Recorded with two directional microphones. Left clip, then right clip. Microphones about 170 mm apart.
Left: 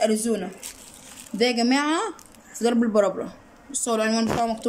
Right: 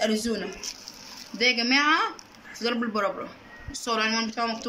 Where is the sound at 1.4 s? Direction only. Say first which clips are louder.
Left 1 dB; 30° left (ahead or behind).